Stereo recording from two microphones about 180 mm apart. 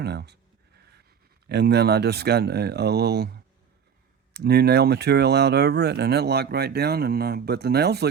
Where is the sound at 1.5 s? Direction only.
65° right (ahead or behind).